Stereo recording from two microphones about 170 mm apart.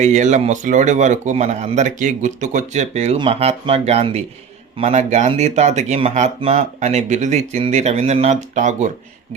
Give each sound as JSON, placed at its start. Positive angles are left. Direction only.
{"t": 0.0, "sound": "speech", "side_deg": -45}